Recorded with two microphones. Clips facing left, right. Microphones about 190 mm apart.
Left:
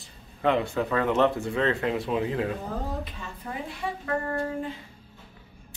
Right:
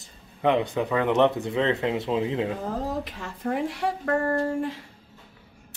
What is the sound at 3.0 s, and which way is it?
A woman's voice, 80° right.